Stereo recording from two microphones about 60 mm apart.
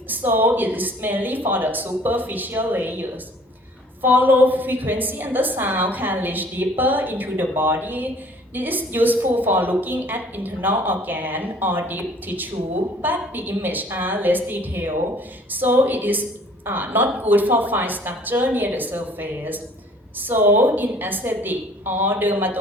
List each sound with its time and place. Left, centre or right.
0.1 s a woman's voice: right